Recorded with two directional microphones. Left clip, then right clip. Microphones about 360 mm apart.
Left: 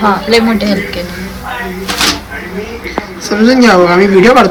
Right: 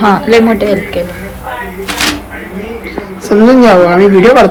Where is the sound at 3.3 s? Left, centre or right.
Centre.